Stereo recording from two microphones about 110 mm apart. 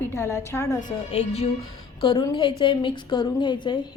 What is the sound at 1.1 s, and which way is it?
Speech, 75° left (ahead or behind).